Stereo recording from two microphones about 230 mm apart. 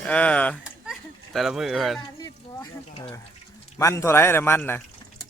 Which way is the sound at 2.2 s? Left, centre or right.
Centre.